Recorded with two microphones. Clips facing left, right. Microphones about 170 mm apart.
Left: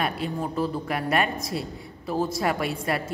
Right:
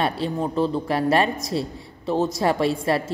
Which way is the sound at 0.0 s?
30° right (ahead or behind).